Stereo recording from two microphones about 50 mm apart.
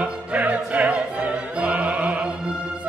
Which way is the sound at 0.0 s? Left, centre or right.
Right.